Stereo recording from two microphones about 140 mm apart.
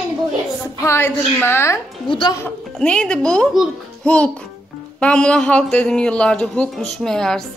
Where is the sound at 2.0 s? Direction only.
35° left (ahead or behind).